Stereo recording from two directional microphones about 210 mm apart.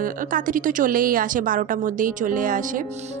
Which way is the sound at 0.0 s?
40° right (ahead or behind).